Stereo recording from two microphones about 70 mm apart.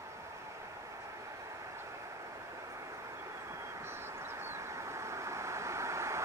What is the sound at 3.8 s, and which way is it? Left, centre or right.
Vehicle, right.